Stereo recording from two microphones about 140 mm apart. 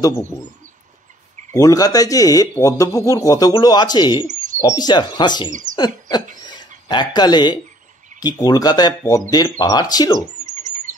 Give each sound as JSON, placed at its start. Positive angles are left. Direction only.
{"t": 0.0, "sound": "speech", "side_deg": 20}
{"t": 1.5, "sound": "speech", "side_deg": 25}
{"t": 4.3, "sound": "bird", "side_deg": -60}
{"t": 4.6, "sound": "speech", "side_deg": 30}
{"t": 5.8, "sound": "owl", "side_deg": 30}
{"t": 6.4, "sound": "a sound", "side_deg": 30}
{"t": 7.2, "sound": "speech", "side_deg": 30}
{"t": 10.4, "sound": "bird", "side_deg": -60}